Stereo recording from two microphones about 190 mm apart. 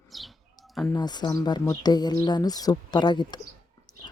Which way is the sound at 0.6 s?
Centre (ahead or behind).